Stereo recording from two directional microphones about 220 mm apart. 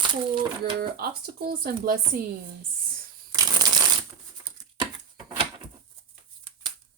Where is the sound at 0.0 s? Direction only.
20° right (ahead or behind).